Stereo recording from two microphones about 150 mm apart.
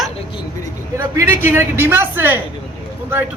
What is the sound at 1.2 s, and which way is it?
A man's voice, 15° right (ahead or behind).